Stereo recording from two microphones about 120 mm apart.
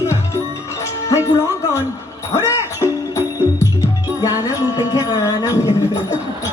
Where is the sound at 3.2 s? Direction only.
25° left (ahead or behind).